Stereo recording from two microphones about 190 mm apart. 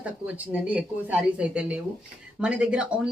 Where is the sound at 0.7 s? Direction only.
5° right (ahead or behind).